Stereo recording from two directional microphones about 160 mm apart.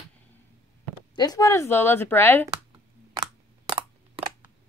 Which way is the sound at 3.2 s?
35° right (ahead or behind).